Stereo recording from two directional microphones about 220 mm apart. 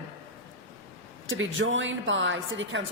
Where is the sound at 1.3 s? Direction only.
60° right (ahead or behind).